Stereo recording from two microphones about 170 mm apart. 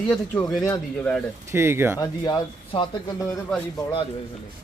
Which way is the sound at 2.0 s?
25° left (ahead or behind).